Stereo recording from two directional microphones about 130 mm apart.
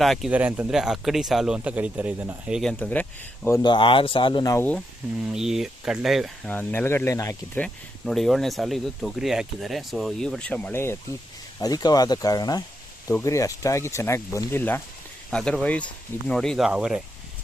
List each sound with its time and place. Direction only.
0.0 s speech: centre (ahead or behind)
0.3 s speech: 10° right (ahead or behind)
2.5 s speech: centre (ahead or behind)
2.7 s speech: 15° left (ahead or behind)
3.6 s speech: 40° left (ahead or behind)
5.2 s speech: 5° right (ahead or behind)
6.5 s speech: 15° left (ahead or behind)
7.5 s speech: 5° left (ahead or behind)
11.6 s speech: 30° left (ahead or behind)
15.3 s speech: 5° left (ahead or behind)